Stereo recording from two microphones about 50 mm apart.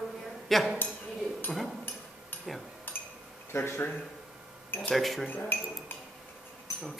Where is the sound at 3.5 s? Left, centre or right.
Left.